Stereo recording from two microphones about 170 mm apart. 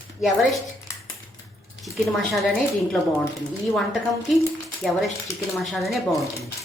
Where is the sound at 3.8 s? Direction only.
Centre (ahead or behind).